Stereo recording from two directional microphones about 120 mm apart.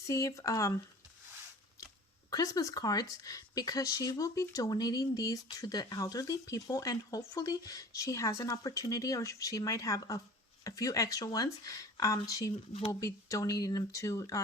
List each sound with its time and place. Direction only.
0.1 s speech: 25° left (ahead or behind)
2.3 s speech: 30° left (ahead or behind)